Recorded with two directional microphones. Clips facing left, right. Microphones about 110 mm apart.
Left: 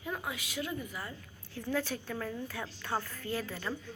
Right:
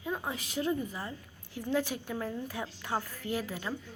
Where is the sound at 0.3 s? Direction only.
35° right (ahead or behind).